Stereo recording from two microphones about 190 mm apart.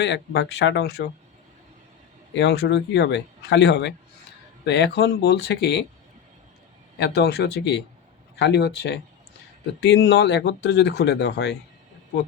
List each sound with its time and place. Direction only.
0.0 s speech: 70° left (ahead or behind)
2.3 s speech: 70° left (ahead or behind)
7.0 s speech: 60° left (ahead or behind)